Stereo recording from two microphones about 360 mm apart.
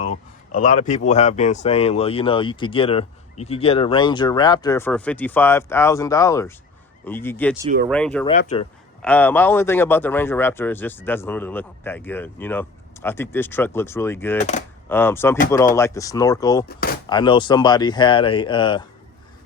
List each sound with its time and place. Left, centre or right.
0.0 s a man's voice: left; by 8.3 s centre
8.3 s speech: centre
9.0 s a man's voice: centre
14.3 s speech: centre
14.8 s speech: centre